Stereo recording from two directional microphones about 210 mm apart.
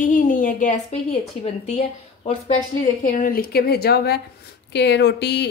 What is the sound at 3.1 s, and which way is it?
A woman's voice, 40° left (ahead or behind).